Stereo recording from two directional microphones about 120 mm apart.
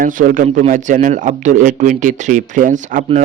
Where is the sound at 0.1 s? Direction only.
85° right.